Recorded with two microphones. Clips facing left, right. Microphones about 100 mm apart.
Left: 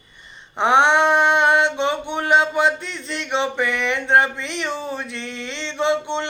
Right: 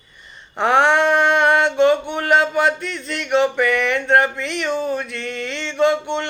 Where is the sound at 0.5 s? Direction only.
20° left (ahead or behind).